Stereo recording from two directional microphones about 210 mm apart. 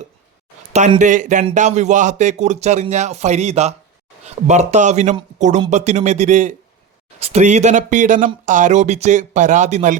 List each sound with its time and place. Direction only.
0.7 s speech: 35° right (ahead or behind)